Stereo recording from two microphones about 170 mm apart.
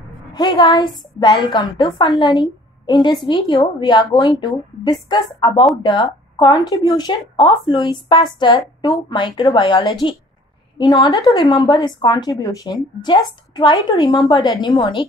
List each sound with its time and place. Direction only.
0.3 s a woman's voice: 25° left (ahead or behind)